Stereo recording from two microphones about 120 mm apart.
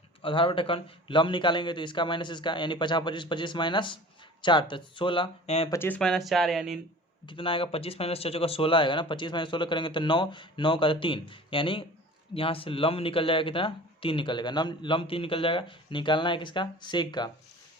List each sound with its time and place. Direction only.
0.2 s speech: 45° left (ahead or behind)
6.0 s speech: centre (ahead or behind)
7.3 s speech: 45° left (ahead or behind)